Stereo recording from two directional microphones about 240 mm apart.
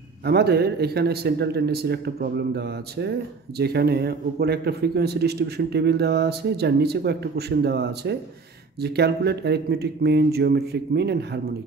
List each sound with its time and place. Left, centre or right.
0.2 s a man's voice: right